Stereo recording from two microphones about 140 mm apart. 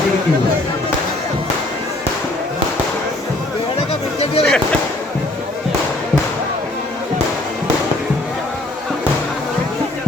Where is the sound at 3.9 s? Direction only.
45° left (ahead or behind).